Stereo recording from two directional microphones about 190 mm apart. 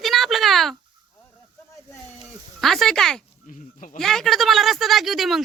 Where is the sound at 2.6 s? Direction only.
Centre (ahead or behind).